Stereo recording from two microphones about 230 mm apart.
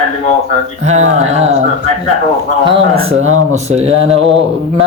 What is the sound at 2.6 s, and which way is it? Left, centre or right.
Speech, right.